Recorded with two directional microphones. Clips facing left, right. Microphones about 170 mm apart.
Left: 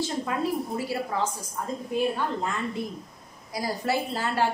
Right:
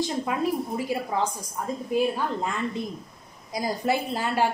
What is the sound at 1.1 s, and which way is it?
Speech, 15° right (ahead or behind).